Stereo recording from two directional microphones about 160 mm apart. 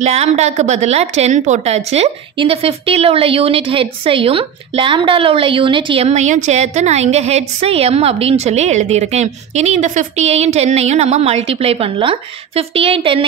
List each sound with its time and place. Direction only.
0.0 s a woman's voice: 45° right (ahead or behind)